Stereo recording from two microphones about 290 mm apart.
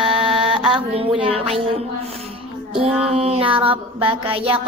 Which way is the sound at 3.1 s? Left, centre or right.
Centre.